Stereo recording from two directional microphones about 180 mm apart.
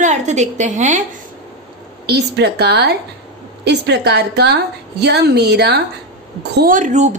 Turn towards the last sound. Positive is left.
turn(degrees=-40)  # may be behind; listen again after turning